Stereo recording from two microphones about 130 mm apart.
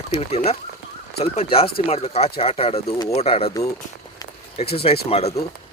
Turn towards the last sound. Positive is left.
turn(degrees=55)  # may be behind; listen again after turning